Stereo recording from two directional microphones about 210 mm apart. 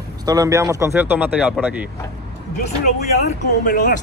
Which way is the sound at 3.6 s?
40° left (ahead or behind).